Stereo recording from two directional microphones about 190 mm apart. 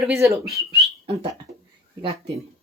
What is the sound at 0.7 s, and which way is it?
Whistling, 30° right (ahead or behind).